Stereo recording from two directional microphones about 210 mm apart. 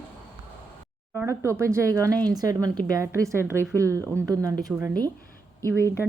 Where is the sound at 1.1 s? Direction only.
10° right (ahead or behind).